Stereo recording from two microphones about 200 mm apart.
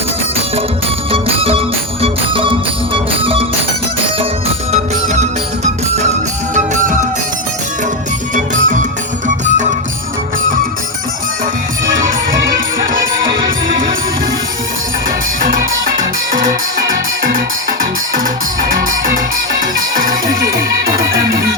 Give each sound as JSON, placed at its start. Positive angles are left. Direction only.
{"t": 1.1, "sound": "music", "side_deg": -30}
{"t": 6.5, "sound": "music", "side_deg": -40}
{"t": 8.6, "sound": "music", "side_deg": -40}